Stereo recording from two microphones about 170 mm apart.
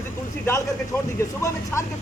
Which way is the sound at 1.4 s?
15° left (ahead or behind).